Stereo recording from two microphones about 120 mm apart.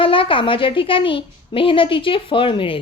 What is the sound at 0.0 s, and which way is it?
Speech, 45° left (ahead or behind).